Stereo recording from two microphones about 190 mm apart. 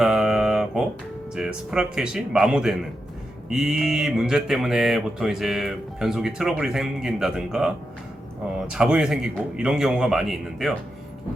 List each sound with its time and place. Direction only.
0.0 s a sound: centre (ahead or behind)
1.4 s speech: 5° right (ahead or behind)
8.7 s speech: 5° right (ahead or behind)